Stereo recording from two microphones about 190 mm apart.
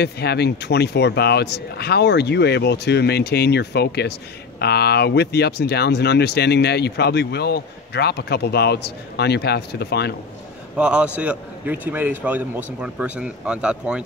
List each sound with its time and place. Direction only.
0.0 s speech: 60° left (ahead or behind)
10.8 s a man's voice: 5° right (ahead or behind)